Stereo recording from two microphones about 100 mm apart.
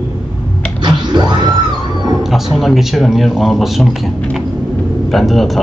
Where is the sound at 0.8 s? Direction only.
45° right (ahead or behind).